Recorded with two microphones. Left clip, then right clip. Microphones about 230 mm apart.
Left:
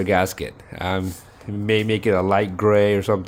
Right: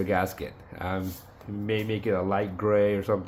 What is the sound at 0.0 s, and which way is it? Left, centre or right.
Speech, left.